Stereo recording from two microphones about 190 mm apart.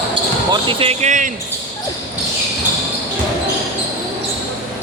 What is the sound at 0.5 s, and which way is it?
Speech, 25° right (ahead or behind).